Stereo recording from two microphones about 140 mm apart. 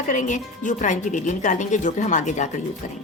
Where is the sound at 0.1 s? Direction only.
65° left (ahead or behind).